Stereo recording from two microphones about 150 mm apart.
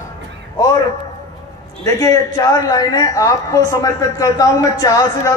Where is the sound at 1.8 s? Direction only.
25° left (ahead or behind).